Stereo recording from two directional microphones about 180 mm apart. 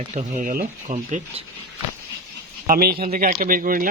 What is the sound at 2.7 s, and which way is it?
Speech, 55° right (ahead or behind).